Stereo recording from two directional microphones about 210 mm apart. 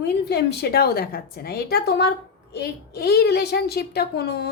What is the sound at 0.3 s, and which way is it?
A woman's voice, 50° left (ahead or behind).